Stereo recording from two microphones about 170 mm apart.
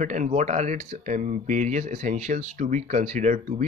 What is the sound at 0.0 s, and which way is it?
Speech, 50° right (ahead or behind).